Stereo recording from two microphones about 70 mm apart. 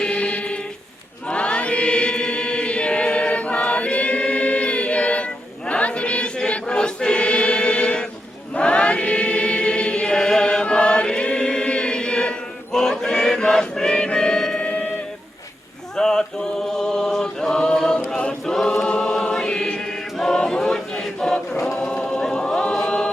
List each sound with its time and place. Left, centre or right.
0.0 s music: centre
1.3 s choir: centre
16.0 s mantra: centre
18.1 s choir: centre